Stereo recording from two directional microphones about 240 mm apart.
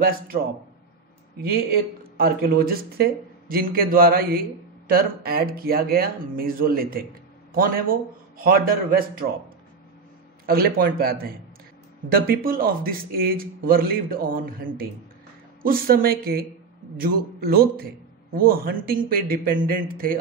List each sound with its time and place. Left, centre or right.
1.4 s a man's voice: right
10.4 s a man's voice: right